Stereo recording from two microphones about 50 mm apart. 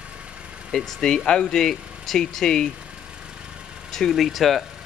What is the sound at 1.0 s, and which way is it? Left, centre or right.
A man's voice, centre.